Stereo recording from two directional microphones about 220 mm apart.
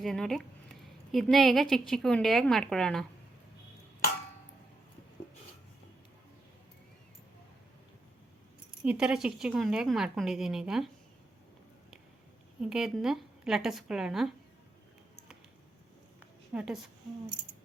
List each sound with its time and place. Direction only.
0.0 s speech: centre (ahead or behind)
8.8 s speech: 5° right (ahead or behind)
12.6 s speech: centre (ahead or behind)
16.5 s a woman's voice: 5° right (ahead or behind)